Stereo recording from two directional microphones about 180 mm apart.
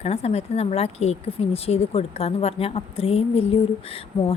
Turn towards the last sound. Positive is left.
turn(degrees=30)  # may be behind; listen again after turning